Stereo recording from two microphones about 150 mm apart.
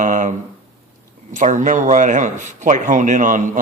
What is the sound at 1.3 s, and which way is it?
Speech, 55° right (ahead or behind).